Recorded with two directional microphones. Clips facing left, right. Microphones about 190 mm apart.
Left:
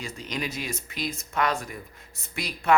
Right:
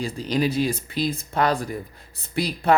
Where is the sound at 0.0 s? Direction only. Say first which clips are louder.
Right 9 dB; 35° right (ahead or behind).